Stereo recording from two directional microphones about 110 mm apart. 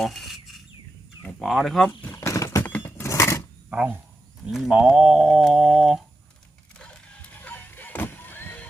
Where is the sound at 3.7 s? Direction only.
10° right (ahead or behind).